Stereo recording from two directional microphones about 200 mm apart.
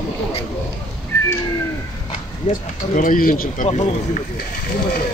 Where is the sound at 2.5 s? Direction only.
40° left (ahead or behind).